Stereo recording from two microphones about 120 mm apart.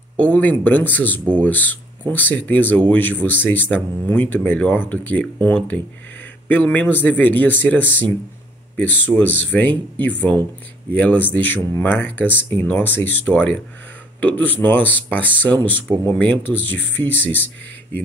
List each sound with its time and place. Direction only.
0.2 s speech: 15° left (ahead or behind)